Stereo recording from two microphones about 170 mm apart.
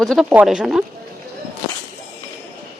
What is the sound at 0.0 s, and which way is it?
Speech, centre (ahead or behind).